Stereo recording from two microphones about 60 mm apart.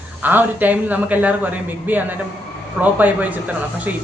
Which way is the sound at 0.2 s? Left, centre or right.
Right.